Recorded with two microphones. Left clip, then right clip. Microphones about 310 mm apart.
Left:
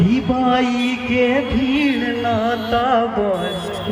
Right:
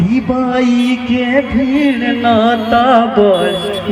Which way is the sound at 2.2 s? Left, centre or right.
Right.